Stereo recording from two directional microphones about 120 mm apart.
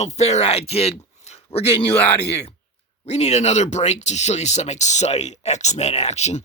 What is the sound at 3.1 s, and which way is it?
Speech, 65° left (ahead or behind).